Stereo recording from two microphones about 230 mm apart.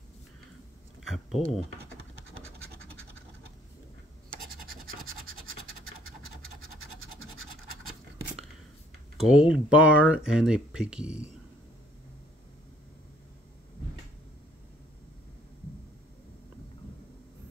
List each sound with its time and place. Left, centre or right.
1.0 s speech: centre
4.6 s scratch: right
6.0 s scratch: right
9.2 s speech: centre